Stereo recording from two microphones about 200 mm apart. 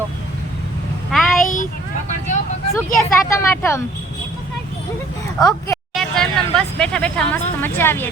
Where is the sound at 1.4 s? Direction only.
40° left (ahead or behind).